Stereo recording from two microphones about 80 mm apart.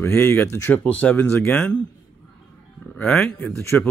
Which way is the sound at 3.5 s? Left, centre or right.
Left.